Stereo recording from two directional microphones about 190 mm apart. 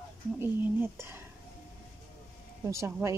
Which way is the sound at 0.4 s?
10° right (ahead or behind).